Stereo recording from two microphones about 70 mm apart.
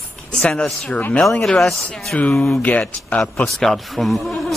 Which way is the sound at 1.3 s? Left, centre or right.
Centre.